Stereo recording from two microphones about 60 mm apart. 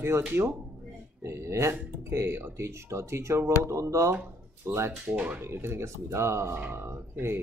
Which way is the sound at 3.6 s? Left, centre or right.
Right.